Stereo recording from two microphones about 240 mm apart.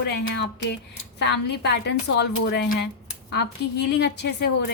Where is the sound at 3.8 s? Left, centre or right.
Left.